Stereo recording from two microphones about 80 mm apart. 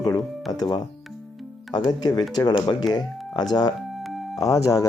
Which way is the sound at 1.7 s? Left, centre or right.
Left.